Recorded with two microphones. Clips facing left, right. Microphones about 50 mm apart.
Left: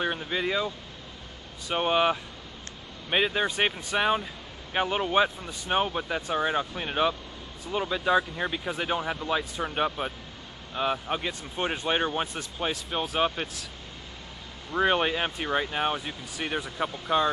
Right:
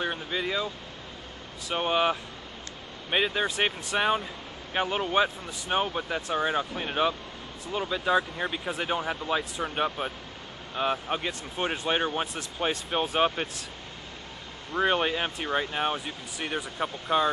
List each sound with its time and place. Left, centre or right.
0.0 s speech: centre
14.7 s speech: centre